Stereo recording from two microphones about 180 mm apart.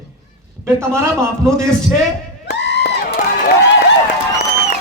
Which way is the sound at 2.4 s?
70° left (ahead or behind).